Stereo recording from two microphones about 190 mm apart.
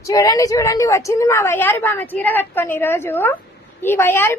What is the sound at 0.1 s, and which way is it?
A woman's voice, 20° left (ahead or behind).